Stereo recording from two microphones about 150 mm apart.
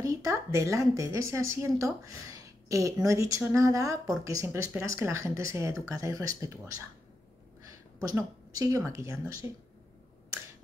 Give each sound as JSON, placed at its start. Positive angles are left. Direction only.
{"t": 0.0, "sound": "speech", "side_deg": -25}
{"t": 7.6, "sound": "speech", "side_deg": -25}